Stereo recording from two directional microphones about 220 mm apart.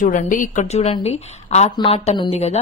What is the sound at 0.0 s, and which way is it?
A woman's voice, 35° left (ahead or behind).